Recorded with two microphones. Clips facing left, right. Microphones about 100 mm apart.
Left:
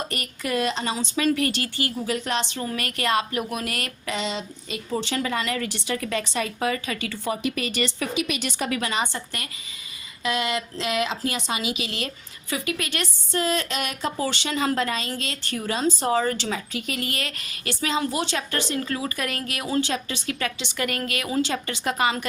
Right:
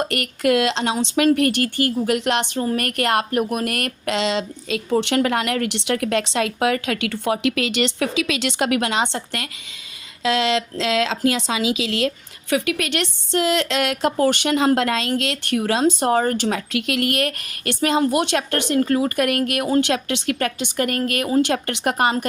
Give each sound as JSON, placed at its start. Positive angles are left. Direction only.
{"t": 0.0, "sound": "a woman's voice", "side_deg": -70}
{"t": 1.0, "sound": "a woman's voice", "side_deg": -65}
{"t": 2.7, "sound": "a woman's voice", "side_deg": -60}
{"t": 16.0, "sound": "a woman's voice", "side_deg": -55}
{"t": 16.7, "sound": "a woman's voice", "side_deg": -75}
{"t": 19.9, "sound": "a woman's voice", "side_deg": -70}
{"t": 21.4, "sound": "a woman's voice", "side_deg": -65}